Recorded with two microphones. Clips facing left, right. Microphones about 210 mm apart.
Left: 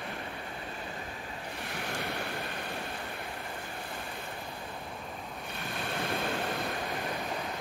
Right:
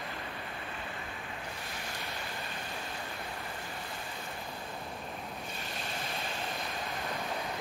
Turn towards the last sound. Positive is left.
turn(degrees=65)  # may be behind; listen again after turning